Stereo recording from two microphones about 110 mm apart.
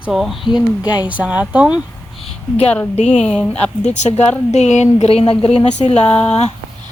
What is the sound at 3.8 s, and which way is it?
A woman's voice, 90° left.